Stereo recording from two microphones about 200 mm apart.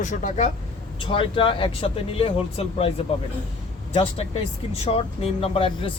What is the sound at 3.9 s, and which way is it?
Speech, 30° left (ahead or behind).